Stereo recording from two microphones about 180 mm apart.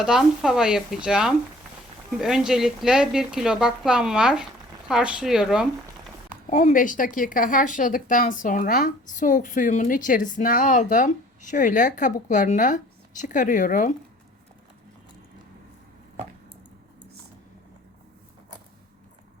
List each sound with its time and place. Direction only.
0.0 s speech: 5° right (ahead or behind)
6.5 s speech: 45° left (ahead or behind)